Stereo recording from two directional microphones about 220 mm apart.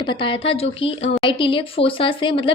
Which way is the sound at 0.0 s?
20° left (ahead or behind).